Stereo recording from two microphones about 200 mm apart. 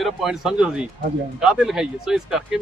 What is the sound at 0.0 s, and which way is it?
Speech, centre (ahead or behind).